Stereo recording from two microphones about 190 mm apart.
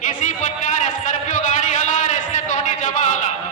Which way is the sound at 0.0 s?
40° left (ahead or behind).